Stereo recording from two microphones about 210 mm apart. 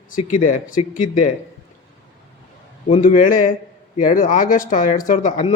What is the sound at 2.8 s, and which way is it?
A man's voice, 35° left (ahead or behind).